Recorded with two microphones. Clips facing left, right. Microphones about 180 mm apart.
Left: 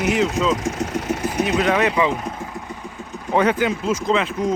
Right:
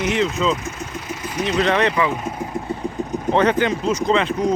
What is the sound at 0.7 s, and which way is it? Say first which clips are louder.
Speech: left 7 dB; 85° left.